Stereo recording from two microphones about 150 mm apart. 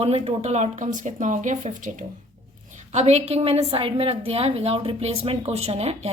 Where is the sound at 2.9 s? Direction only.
45° right (ahead or behind).